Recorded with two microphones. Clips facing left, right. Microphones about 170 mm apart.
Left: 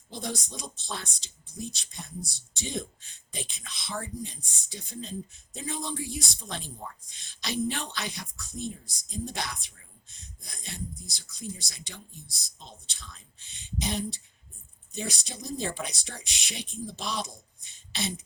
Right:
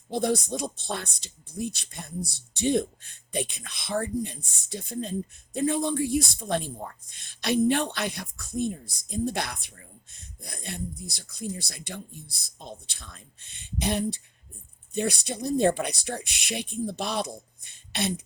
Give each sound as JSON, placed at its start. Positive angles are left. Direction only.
{"t": 0.1, "sound": "speech", "side_deg": -55}